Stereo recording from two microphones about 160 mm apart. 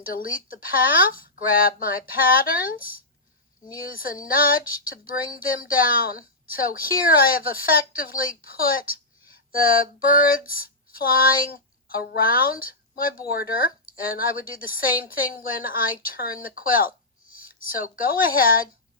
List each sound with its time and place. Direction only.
0.0 s female singing: 60° left (ahead or behind)
17.2 s speech: 60° left (ahead or behind)